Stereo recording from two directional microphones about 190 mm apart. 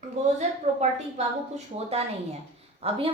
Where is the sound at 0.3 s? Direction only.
35° right (ahead or behind).